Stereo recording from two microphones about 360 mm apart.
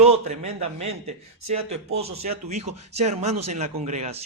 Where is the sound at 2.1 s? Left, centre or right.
Right.